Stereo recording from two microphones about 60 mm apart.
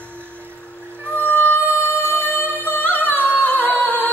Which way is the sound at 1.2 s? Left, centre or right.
Left.